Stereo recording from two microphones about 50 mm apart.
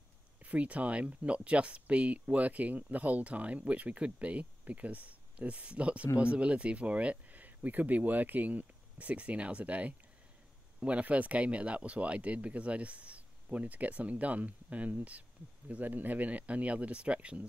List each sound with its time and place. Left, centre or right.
0.4 s speech: right